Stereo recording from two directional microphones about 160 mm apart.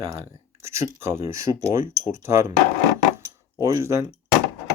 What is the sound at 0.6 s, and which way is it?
Speech, 15° right (ahead or behind).